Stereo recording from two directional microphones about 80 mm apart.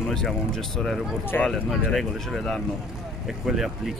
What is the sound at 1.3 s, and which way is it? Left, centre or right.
Speech, left.